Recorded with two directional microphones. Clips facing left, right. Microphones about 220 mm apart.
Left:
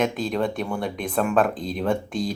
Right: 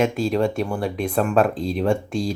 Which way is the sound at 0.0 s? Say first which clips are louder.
Right 4 dB; centre (ahead or behind).